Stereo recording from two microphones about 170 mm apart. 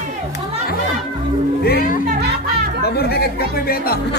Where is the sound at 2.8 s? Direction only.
70° left (ahead or behind).